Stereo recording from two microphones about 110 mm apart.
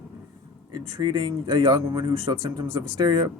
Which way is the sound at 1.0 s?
40° right (ahead or behind).